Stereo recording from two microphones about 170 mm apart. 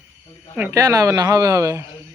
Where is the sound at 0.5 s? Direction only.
10° right (ahead or behind).